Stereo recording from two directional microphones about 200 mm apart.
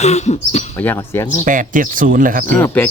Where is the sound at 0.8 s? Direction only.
10° left (ahead or behind).